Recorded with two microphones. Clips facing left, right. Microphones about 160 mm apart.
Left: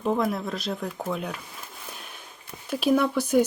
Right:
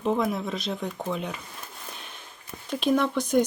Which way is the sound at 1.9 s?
5° left (ahead or behind).